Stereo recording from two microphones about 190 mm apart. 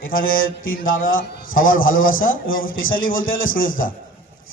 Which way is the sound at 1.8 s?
90° left.